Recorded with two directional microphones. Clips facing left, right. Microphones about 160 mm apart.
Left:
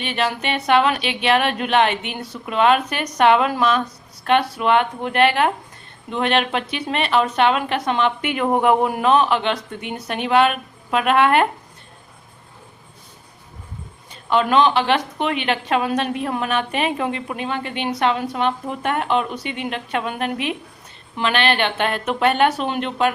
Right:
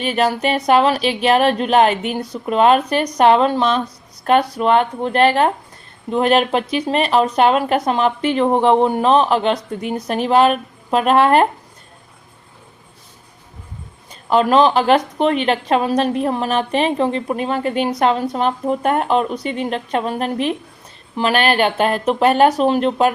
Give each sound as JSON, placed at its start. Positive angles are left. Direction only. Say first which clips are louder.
{"t": 0.0, "sound": "a woman's voice", "louder": "right 5 dB", "side_deg": -40}
{"t": 14.1, "sound": "a woman's voice", "louder": "right 4 dB", "side_deg": -40}